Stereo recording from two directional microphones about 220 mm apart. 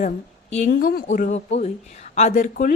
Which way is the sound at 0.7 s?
40° left (ahead or behind).